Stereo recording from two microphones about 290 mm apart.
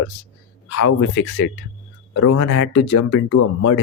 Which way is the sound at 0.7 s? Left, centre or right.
Left.